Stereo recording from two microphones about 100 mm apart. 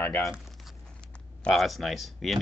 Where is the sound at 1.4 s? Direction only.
Centre (ahead or behind).